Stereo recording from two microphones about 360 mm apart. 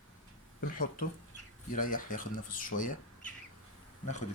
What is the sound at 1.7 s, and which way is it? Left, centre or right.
Speech, left.